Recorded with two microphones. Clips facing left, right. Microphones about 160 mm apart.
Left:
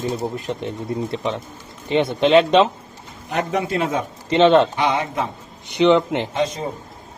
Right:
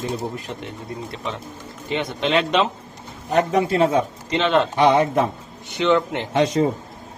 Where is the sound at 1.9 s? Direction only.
30° left (ahead or behind).